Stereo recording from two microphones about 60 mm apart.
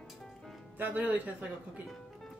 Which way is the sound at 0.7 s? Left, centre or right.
Right.